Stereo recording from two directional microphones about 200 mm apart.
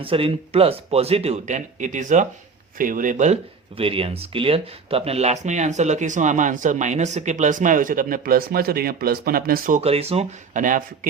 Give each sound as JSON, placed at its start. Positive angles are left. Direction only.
{"t": 0.0, "sound": "speech", "side_deg": -30}
{"t": 3.8, "sound": "speech", "side_deg": -30}